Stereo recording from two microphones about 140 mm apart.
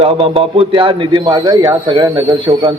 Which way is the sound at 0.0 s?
40° right (ahead or behind).